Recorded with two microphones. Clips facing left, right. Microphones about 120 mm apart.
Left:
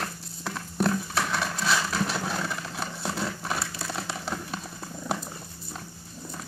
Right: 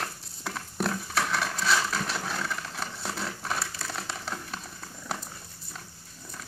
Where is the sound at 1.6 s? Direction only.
5° left (ahead or behind).